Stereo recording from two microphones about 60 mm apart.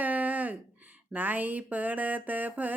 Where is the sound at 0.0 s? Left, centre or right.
Right.